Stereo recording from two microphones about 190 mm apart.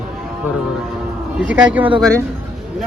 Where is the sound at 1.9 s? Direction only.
20° right (ahead or behind).